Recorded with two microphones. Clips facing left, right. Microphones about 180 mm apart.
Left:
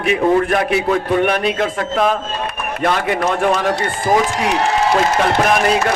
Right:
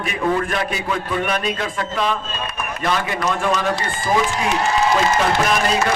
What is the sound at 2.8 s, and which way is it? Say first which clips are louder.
Speech: left 5 dB; 60° left (ahead or behind).